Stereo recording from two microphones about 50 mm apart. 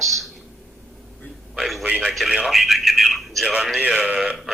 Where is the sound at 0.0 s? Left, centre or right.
Centre.